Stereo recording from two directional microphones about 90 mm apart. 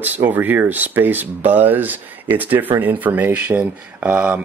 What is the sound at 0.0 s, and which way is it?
Speech, 20° right (ahead or behind).